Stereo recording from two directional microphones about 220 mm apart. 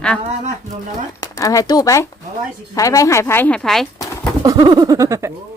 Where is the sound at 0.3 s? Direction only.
30° right (ahead or behind).